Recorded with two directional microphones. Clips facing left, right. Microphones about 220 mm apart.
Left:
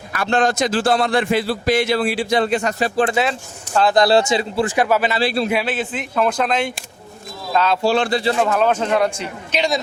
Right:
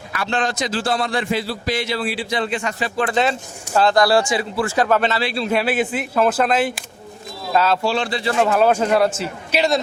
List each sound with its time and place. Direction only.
0.1 s a man's voice: 45° left (ahead or behind)
3.9 s a man's voice: 20° left (ahead or behind)
5.2 s a man's voice: 40° left (ahead or behind)
5.6 s a man's voice: 10° right (ahead or behind)
7.9 s a man's voice: 50° left (ahead or behind)
8.4 s a man's voice: 5° right (ahead or behind)